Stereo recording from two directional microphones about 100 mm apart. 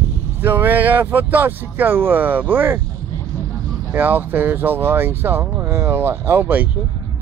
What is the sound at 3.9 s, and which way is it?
Speech, 20° right (ahead or behind).